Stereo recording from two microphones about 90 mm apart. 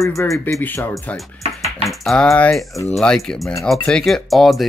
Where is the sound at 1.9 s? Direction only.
5° left (ahead or behind).